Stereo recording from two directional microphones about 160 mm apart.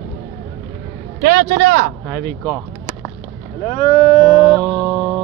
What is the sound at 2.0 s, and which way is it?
Speech, 10° left (ahead or behind).